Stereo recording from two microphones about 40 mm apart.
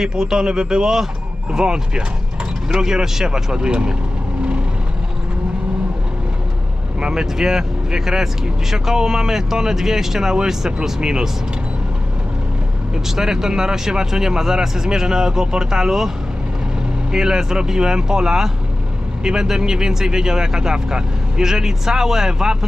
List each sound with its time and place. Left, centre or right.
0.0 s speech: centre
7.0 s speech: centre
12.9 s speech: centre